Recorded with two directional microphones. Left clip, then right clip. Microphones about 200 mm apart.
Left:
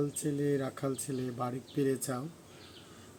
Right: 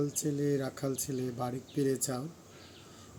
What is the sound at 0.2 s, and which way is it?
Speech, 10° right (ahead or behind).